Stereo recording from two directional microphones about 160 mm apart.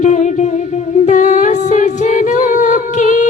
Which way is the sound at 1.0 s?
50° left (ahead or behind).